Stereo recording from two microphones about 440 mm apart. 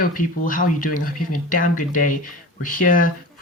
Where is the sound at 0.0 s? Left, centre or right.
Centre.